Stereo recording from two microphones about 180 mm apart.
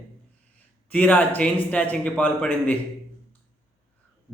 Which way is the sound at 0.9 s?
10° left (ahead or behind).